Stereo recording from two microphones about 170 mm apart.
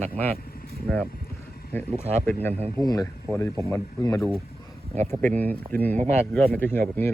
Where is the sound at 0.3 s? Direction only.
60° left (ahead or behind).